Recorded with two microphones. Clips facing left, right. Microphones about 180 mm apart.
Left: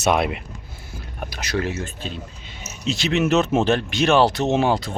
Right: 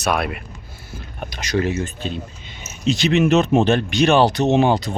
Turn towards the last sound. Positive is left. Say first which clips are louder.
# right 3 dB
turn(degrees=0)  # may be behind; listen again after turning